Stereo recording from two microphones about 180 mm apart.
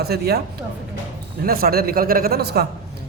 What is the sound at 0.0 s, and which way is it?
A man's voice, 60° right (ahead or behind).